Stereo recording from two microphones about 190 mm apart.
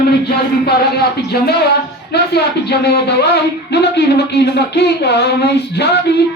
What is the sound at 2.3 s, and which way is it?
Speech, 60° left (ahead or behind).